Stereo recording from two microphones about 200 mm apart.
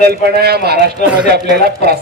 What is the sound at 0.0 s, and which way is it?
A man's voice, 50° right (ahead or behind).